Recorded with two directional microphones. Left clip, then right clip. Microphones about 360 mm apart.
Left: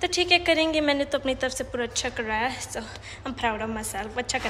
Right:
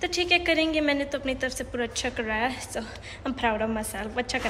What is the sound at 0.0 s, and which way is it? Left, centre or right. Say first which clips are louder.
A woman's voice: left 2 dB; centre.